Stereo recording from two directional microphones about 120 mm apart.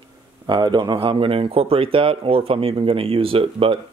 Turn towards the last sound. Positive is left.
turn(degrees=-50)  # may be behind; listen again after turning